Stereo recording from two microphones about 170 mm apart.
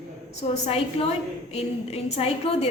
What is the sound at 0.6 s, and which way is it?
A woman's voice, 35° left (ahead or behind).